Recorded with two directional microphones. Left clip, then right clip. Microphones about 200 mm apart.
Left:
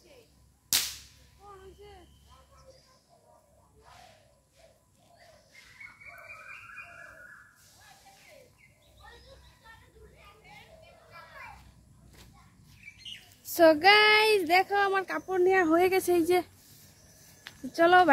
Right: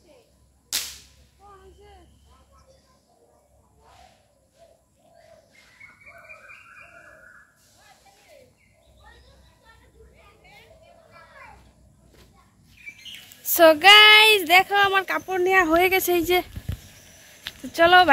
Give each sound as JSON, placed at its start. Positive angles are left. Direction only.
{"t": 0.7, "sound": "whip", "side_deg": 55}
{"t": 13.5, "sound": "speech", "side_deg": -10}
{"t": 17.4, "sound": "a sound", "side_deg": 0}